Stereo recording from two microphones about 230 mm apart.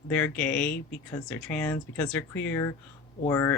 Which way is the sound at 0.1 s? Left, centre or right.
Centre.